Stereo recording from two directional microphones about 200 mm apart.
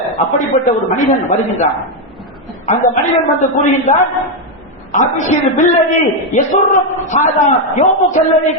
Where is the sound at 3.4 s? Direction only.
35° left (ahead or behind).